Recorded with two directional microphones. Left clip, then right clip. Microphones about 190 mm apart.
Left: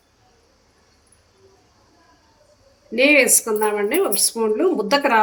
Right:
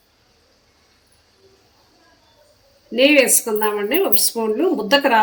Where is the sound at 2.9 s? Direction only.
25° right (ahead or behind).